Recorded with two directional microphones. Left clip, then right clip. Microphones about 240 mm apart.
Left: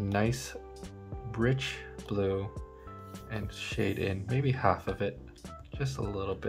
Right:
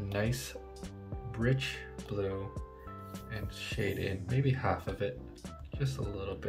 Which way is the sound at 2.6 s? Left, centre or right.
Centre.